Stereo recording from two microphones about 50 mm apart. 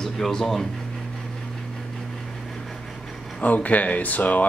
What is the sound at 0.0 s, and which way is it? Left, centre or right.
Speech, centre.